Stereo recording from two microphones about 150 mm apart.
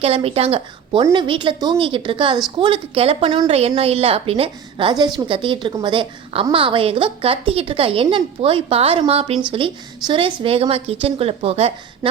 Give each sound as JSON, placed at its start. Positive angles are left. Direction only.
{"t": 0.0, "sound": "a woman's voice", "side_deg": -40}
{"t": 1.1, "sound": "a woman's voice", "side_deg": -30}